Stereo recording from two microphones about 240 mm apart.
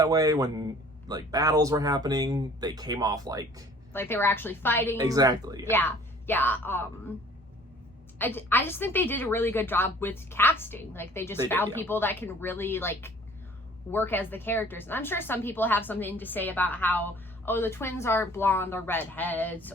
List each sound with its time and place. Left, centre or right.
0.0 s speech: centre
3.9 s a woman's voice: centre
4.9 s speech: centre
5.6 s a woman's voice: centre
8.2 s a woman's voice: centre